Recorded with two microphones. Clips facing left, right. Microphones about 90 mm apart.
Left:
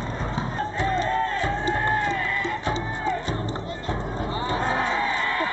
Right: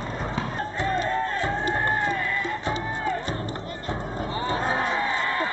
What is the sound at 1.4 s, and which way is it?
Music, 15° right (ahead or behind).